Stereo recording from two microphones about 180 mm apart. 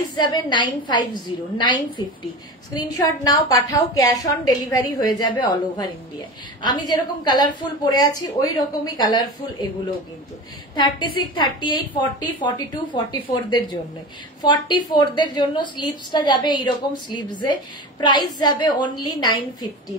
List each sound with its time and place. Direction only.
0.1 s a woman's voice: 25° left (ahead or behind)
10.8 s a woman's voice: 25° left (ahead or behind)